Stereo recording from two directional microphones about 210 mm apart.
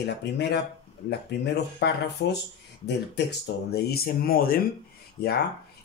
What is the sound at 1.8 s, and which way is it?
Speech, 55° left (ahead or behind).